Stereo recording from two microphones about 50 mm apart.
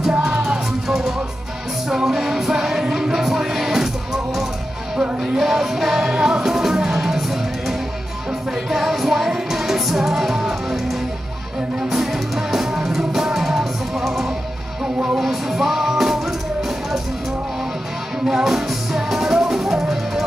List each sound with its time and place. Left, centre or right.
0.1 s music: right
0.4 s music: centre
5.4 s music: centre
11.9 s music: centre
18.2 s music: centre